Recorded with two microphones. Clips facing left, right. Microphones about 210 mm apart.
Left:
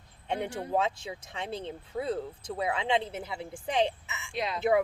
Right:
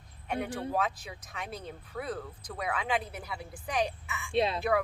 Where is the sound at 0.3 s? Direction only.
25° left (ahead or behind).